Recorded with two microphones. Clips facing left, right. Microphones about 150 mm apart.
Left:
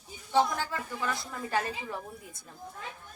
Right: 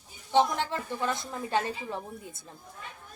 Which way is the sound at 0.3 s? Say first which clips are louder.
Right 2 dB; 25° right (ahead or behind).